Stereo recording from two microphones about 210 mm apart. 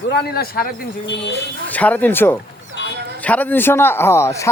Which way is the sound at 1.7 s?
5° left (ahead or behind).